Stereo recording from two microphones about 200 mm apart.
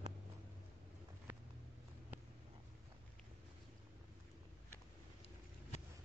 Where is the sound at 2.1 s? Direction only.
10° right (ahead or behind).